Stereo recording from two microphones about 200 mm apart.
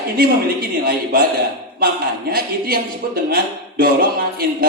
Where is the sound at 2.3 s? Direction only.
50° right (ahead or behind).